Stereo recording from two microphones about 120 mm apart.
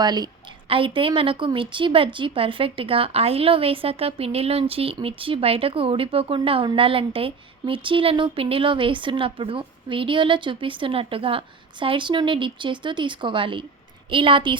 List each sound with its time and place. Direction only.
0.0 s a woman's voice: 35° right (ahead or behind)
0.7 s speech: 45° right (ahead or behind)